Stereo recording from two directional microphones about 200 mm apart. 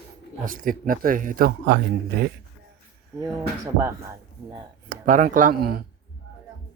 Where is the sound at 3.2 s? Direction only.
15° right (ahead or behind).